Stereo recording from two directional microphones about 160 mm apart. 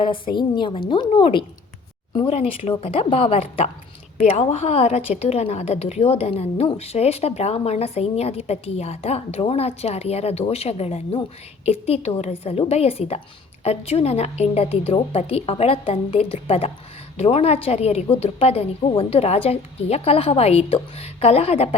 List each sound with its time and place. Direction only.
0.0 s a woman's voice: 30° left (ahead or behind)